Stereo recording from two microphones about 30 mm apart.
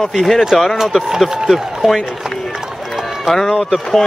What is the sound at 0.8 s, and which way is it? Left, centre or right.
Speech, centre.